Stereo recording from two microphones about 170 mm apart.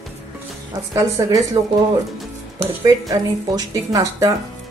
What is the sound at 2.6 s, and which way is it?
Speech, 20° right (ahead or behind).